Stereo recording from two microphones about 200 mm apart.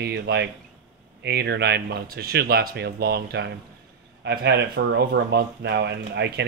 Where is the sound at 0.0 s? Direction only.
55° right (ahead or behind).